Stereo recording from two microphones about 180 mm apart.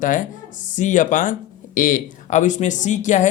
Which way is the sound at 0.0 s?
45° left (ahead or behind).